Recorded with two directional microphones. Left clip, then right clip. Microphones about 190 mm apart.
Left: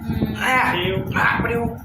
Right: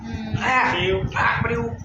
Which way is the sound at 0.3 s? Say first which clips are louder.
Left 1 dB; 35° left (ahead or behind).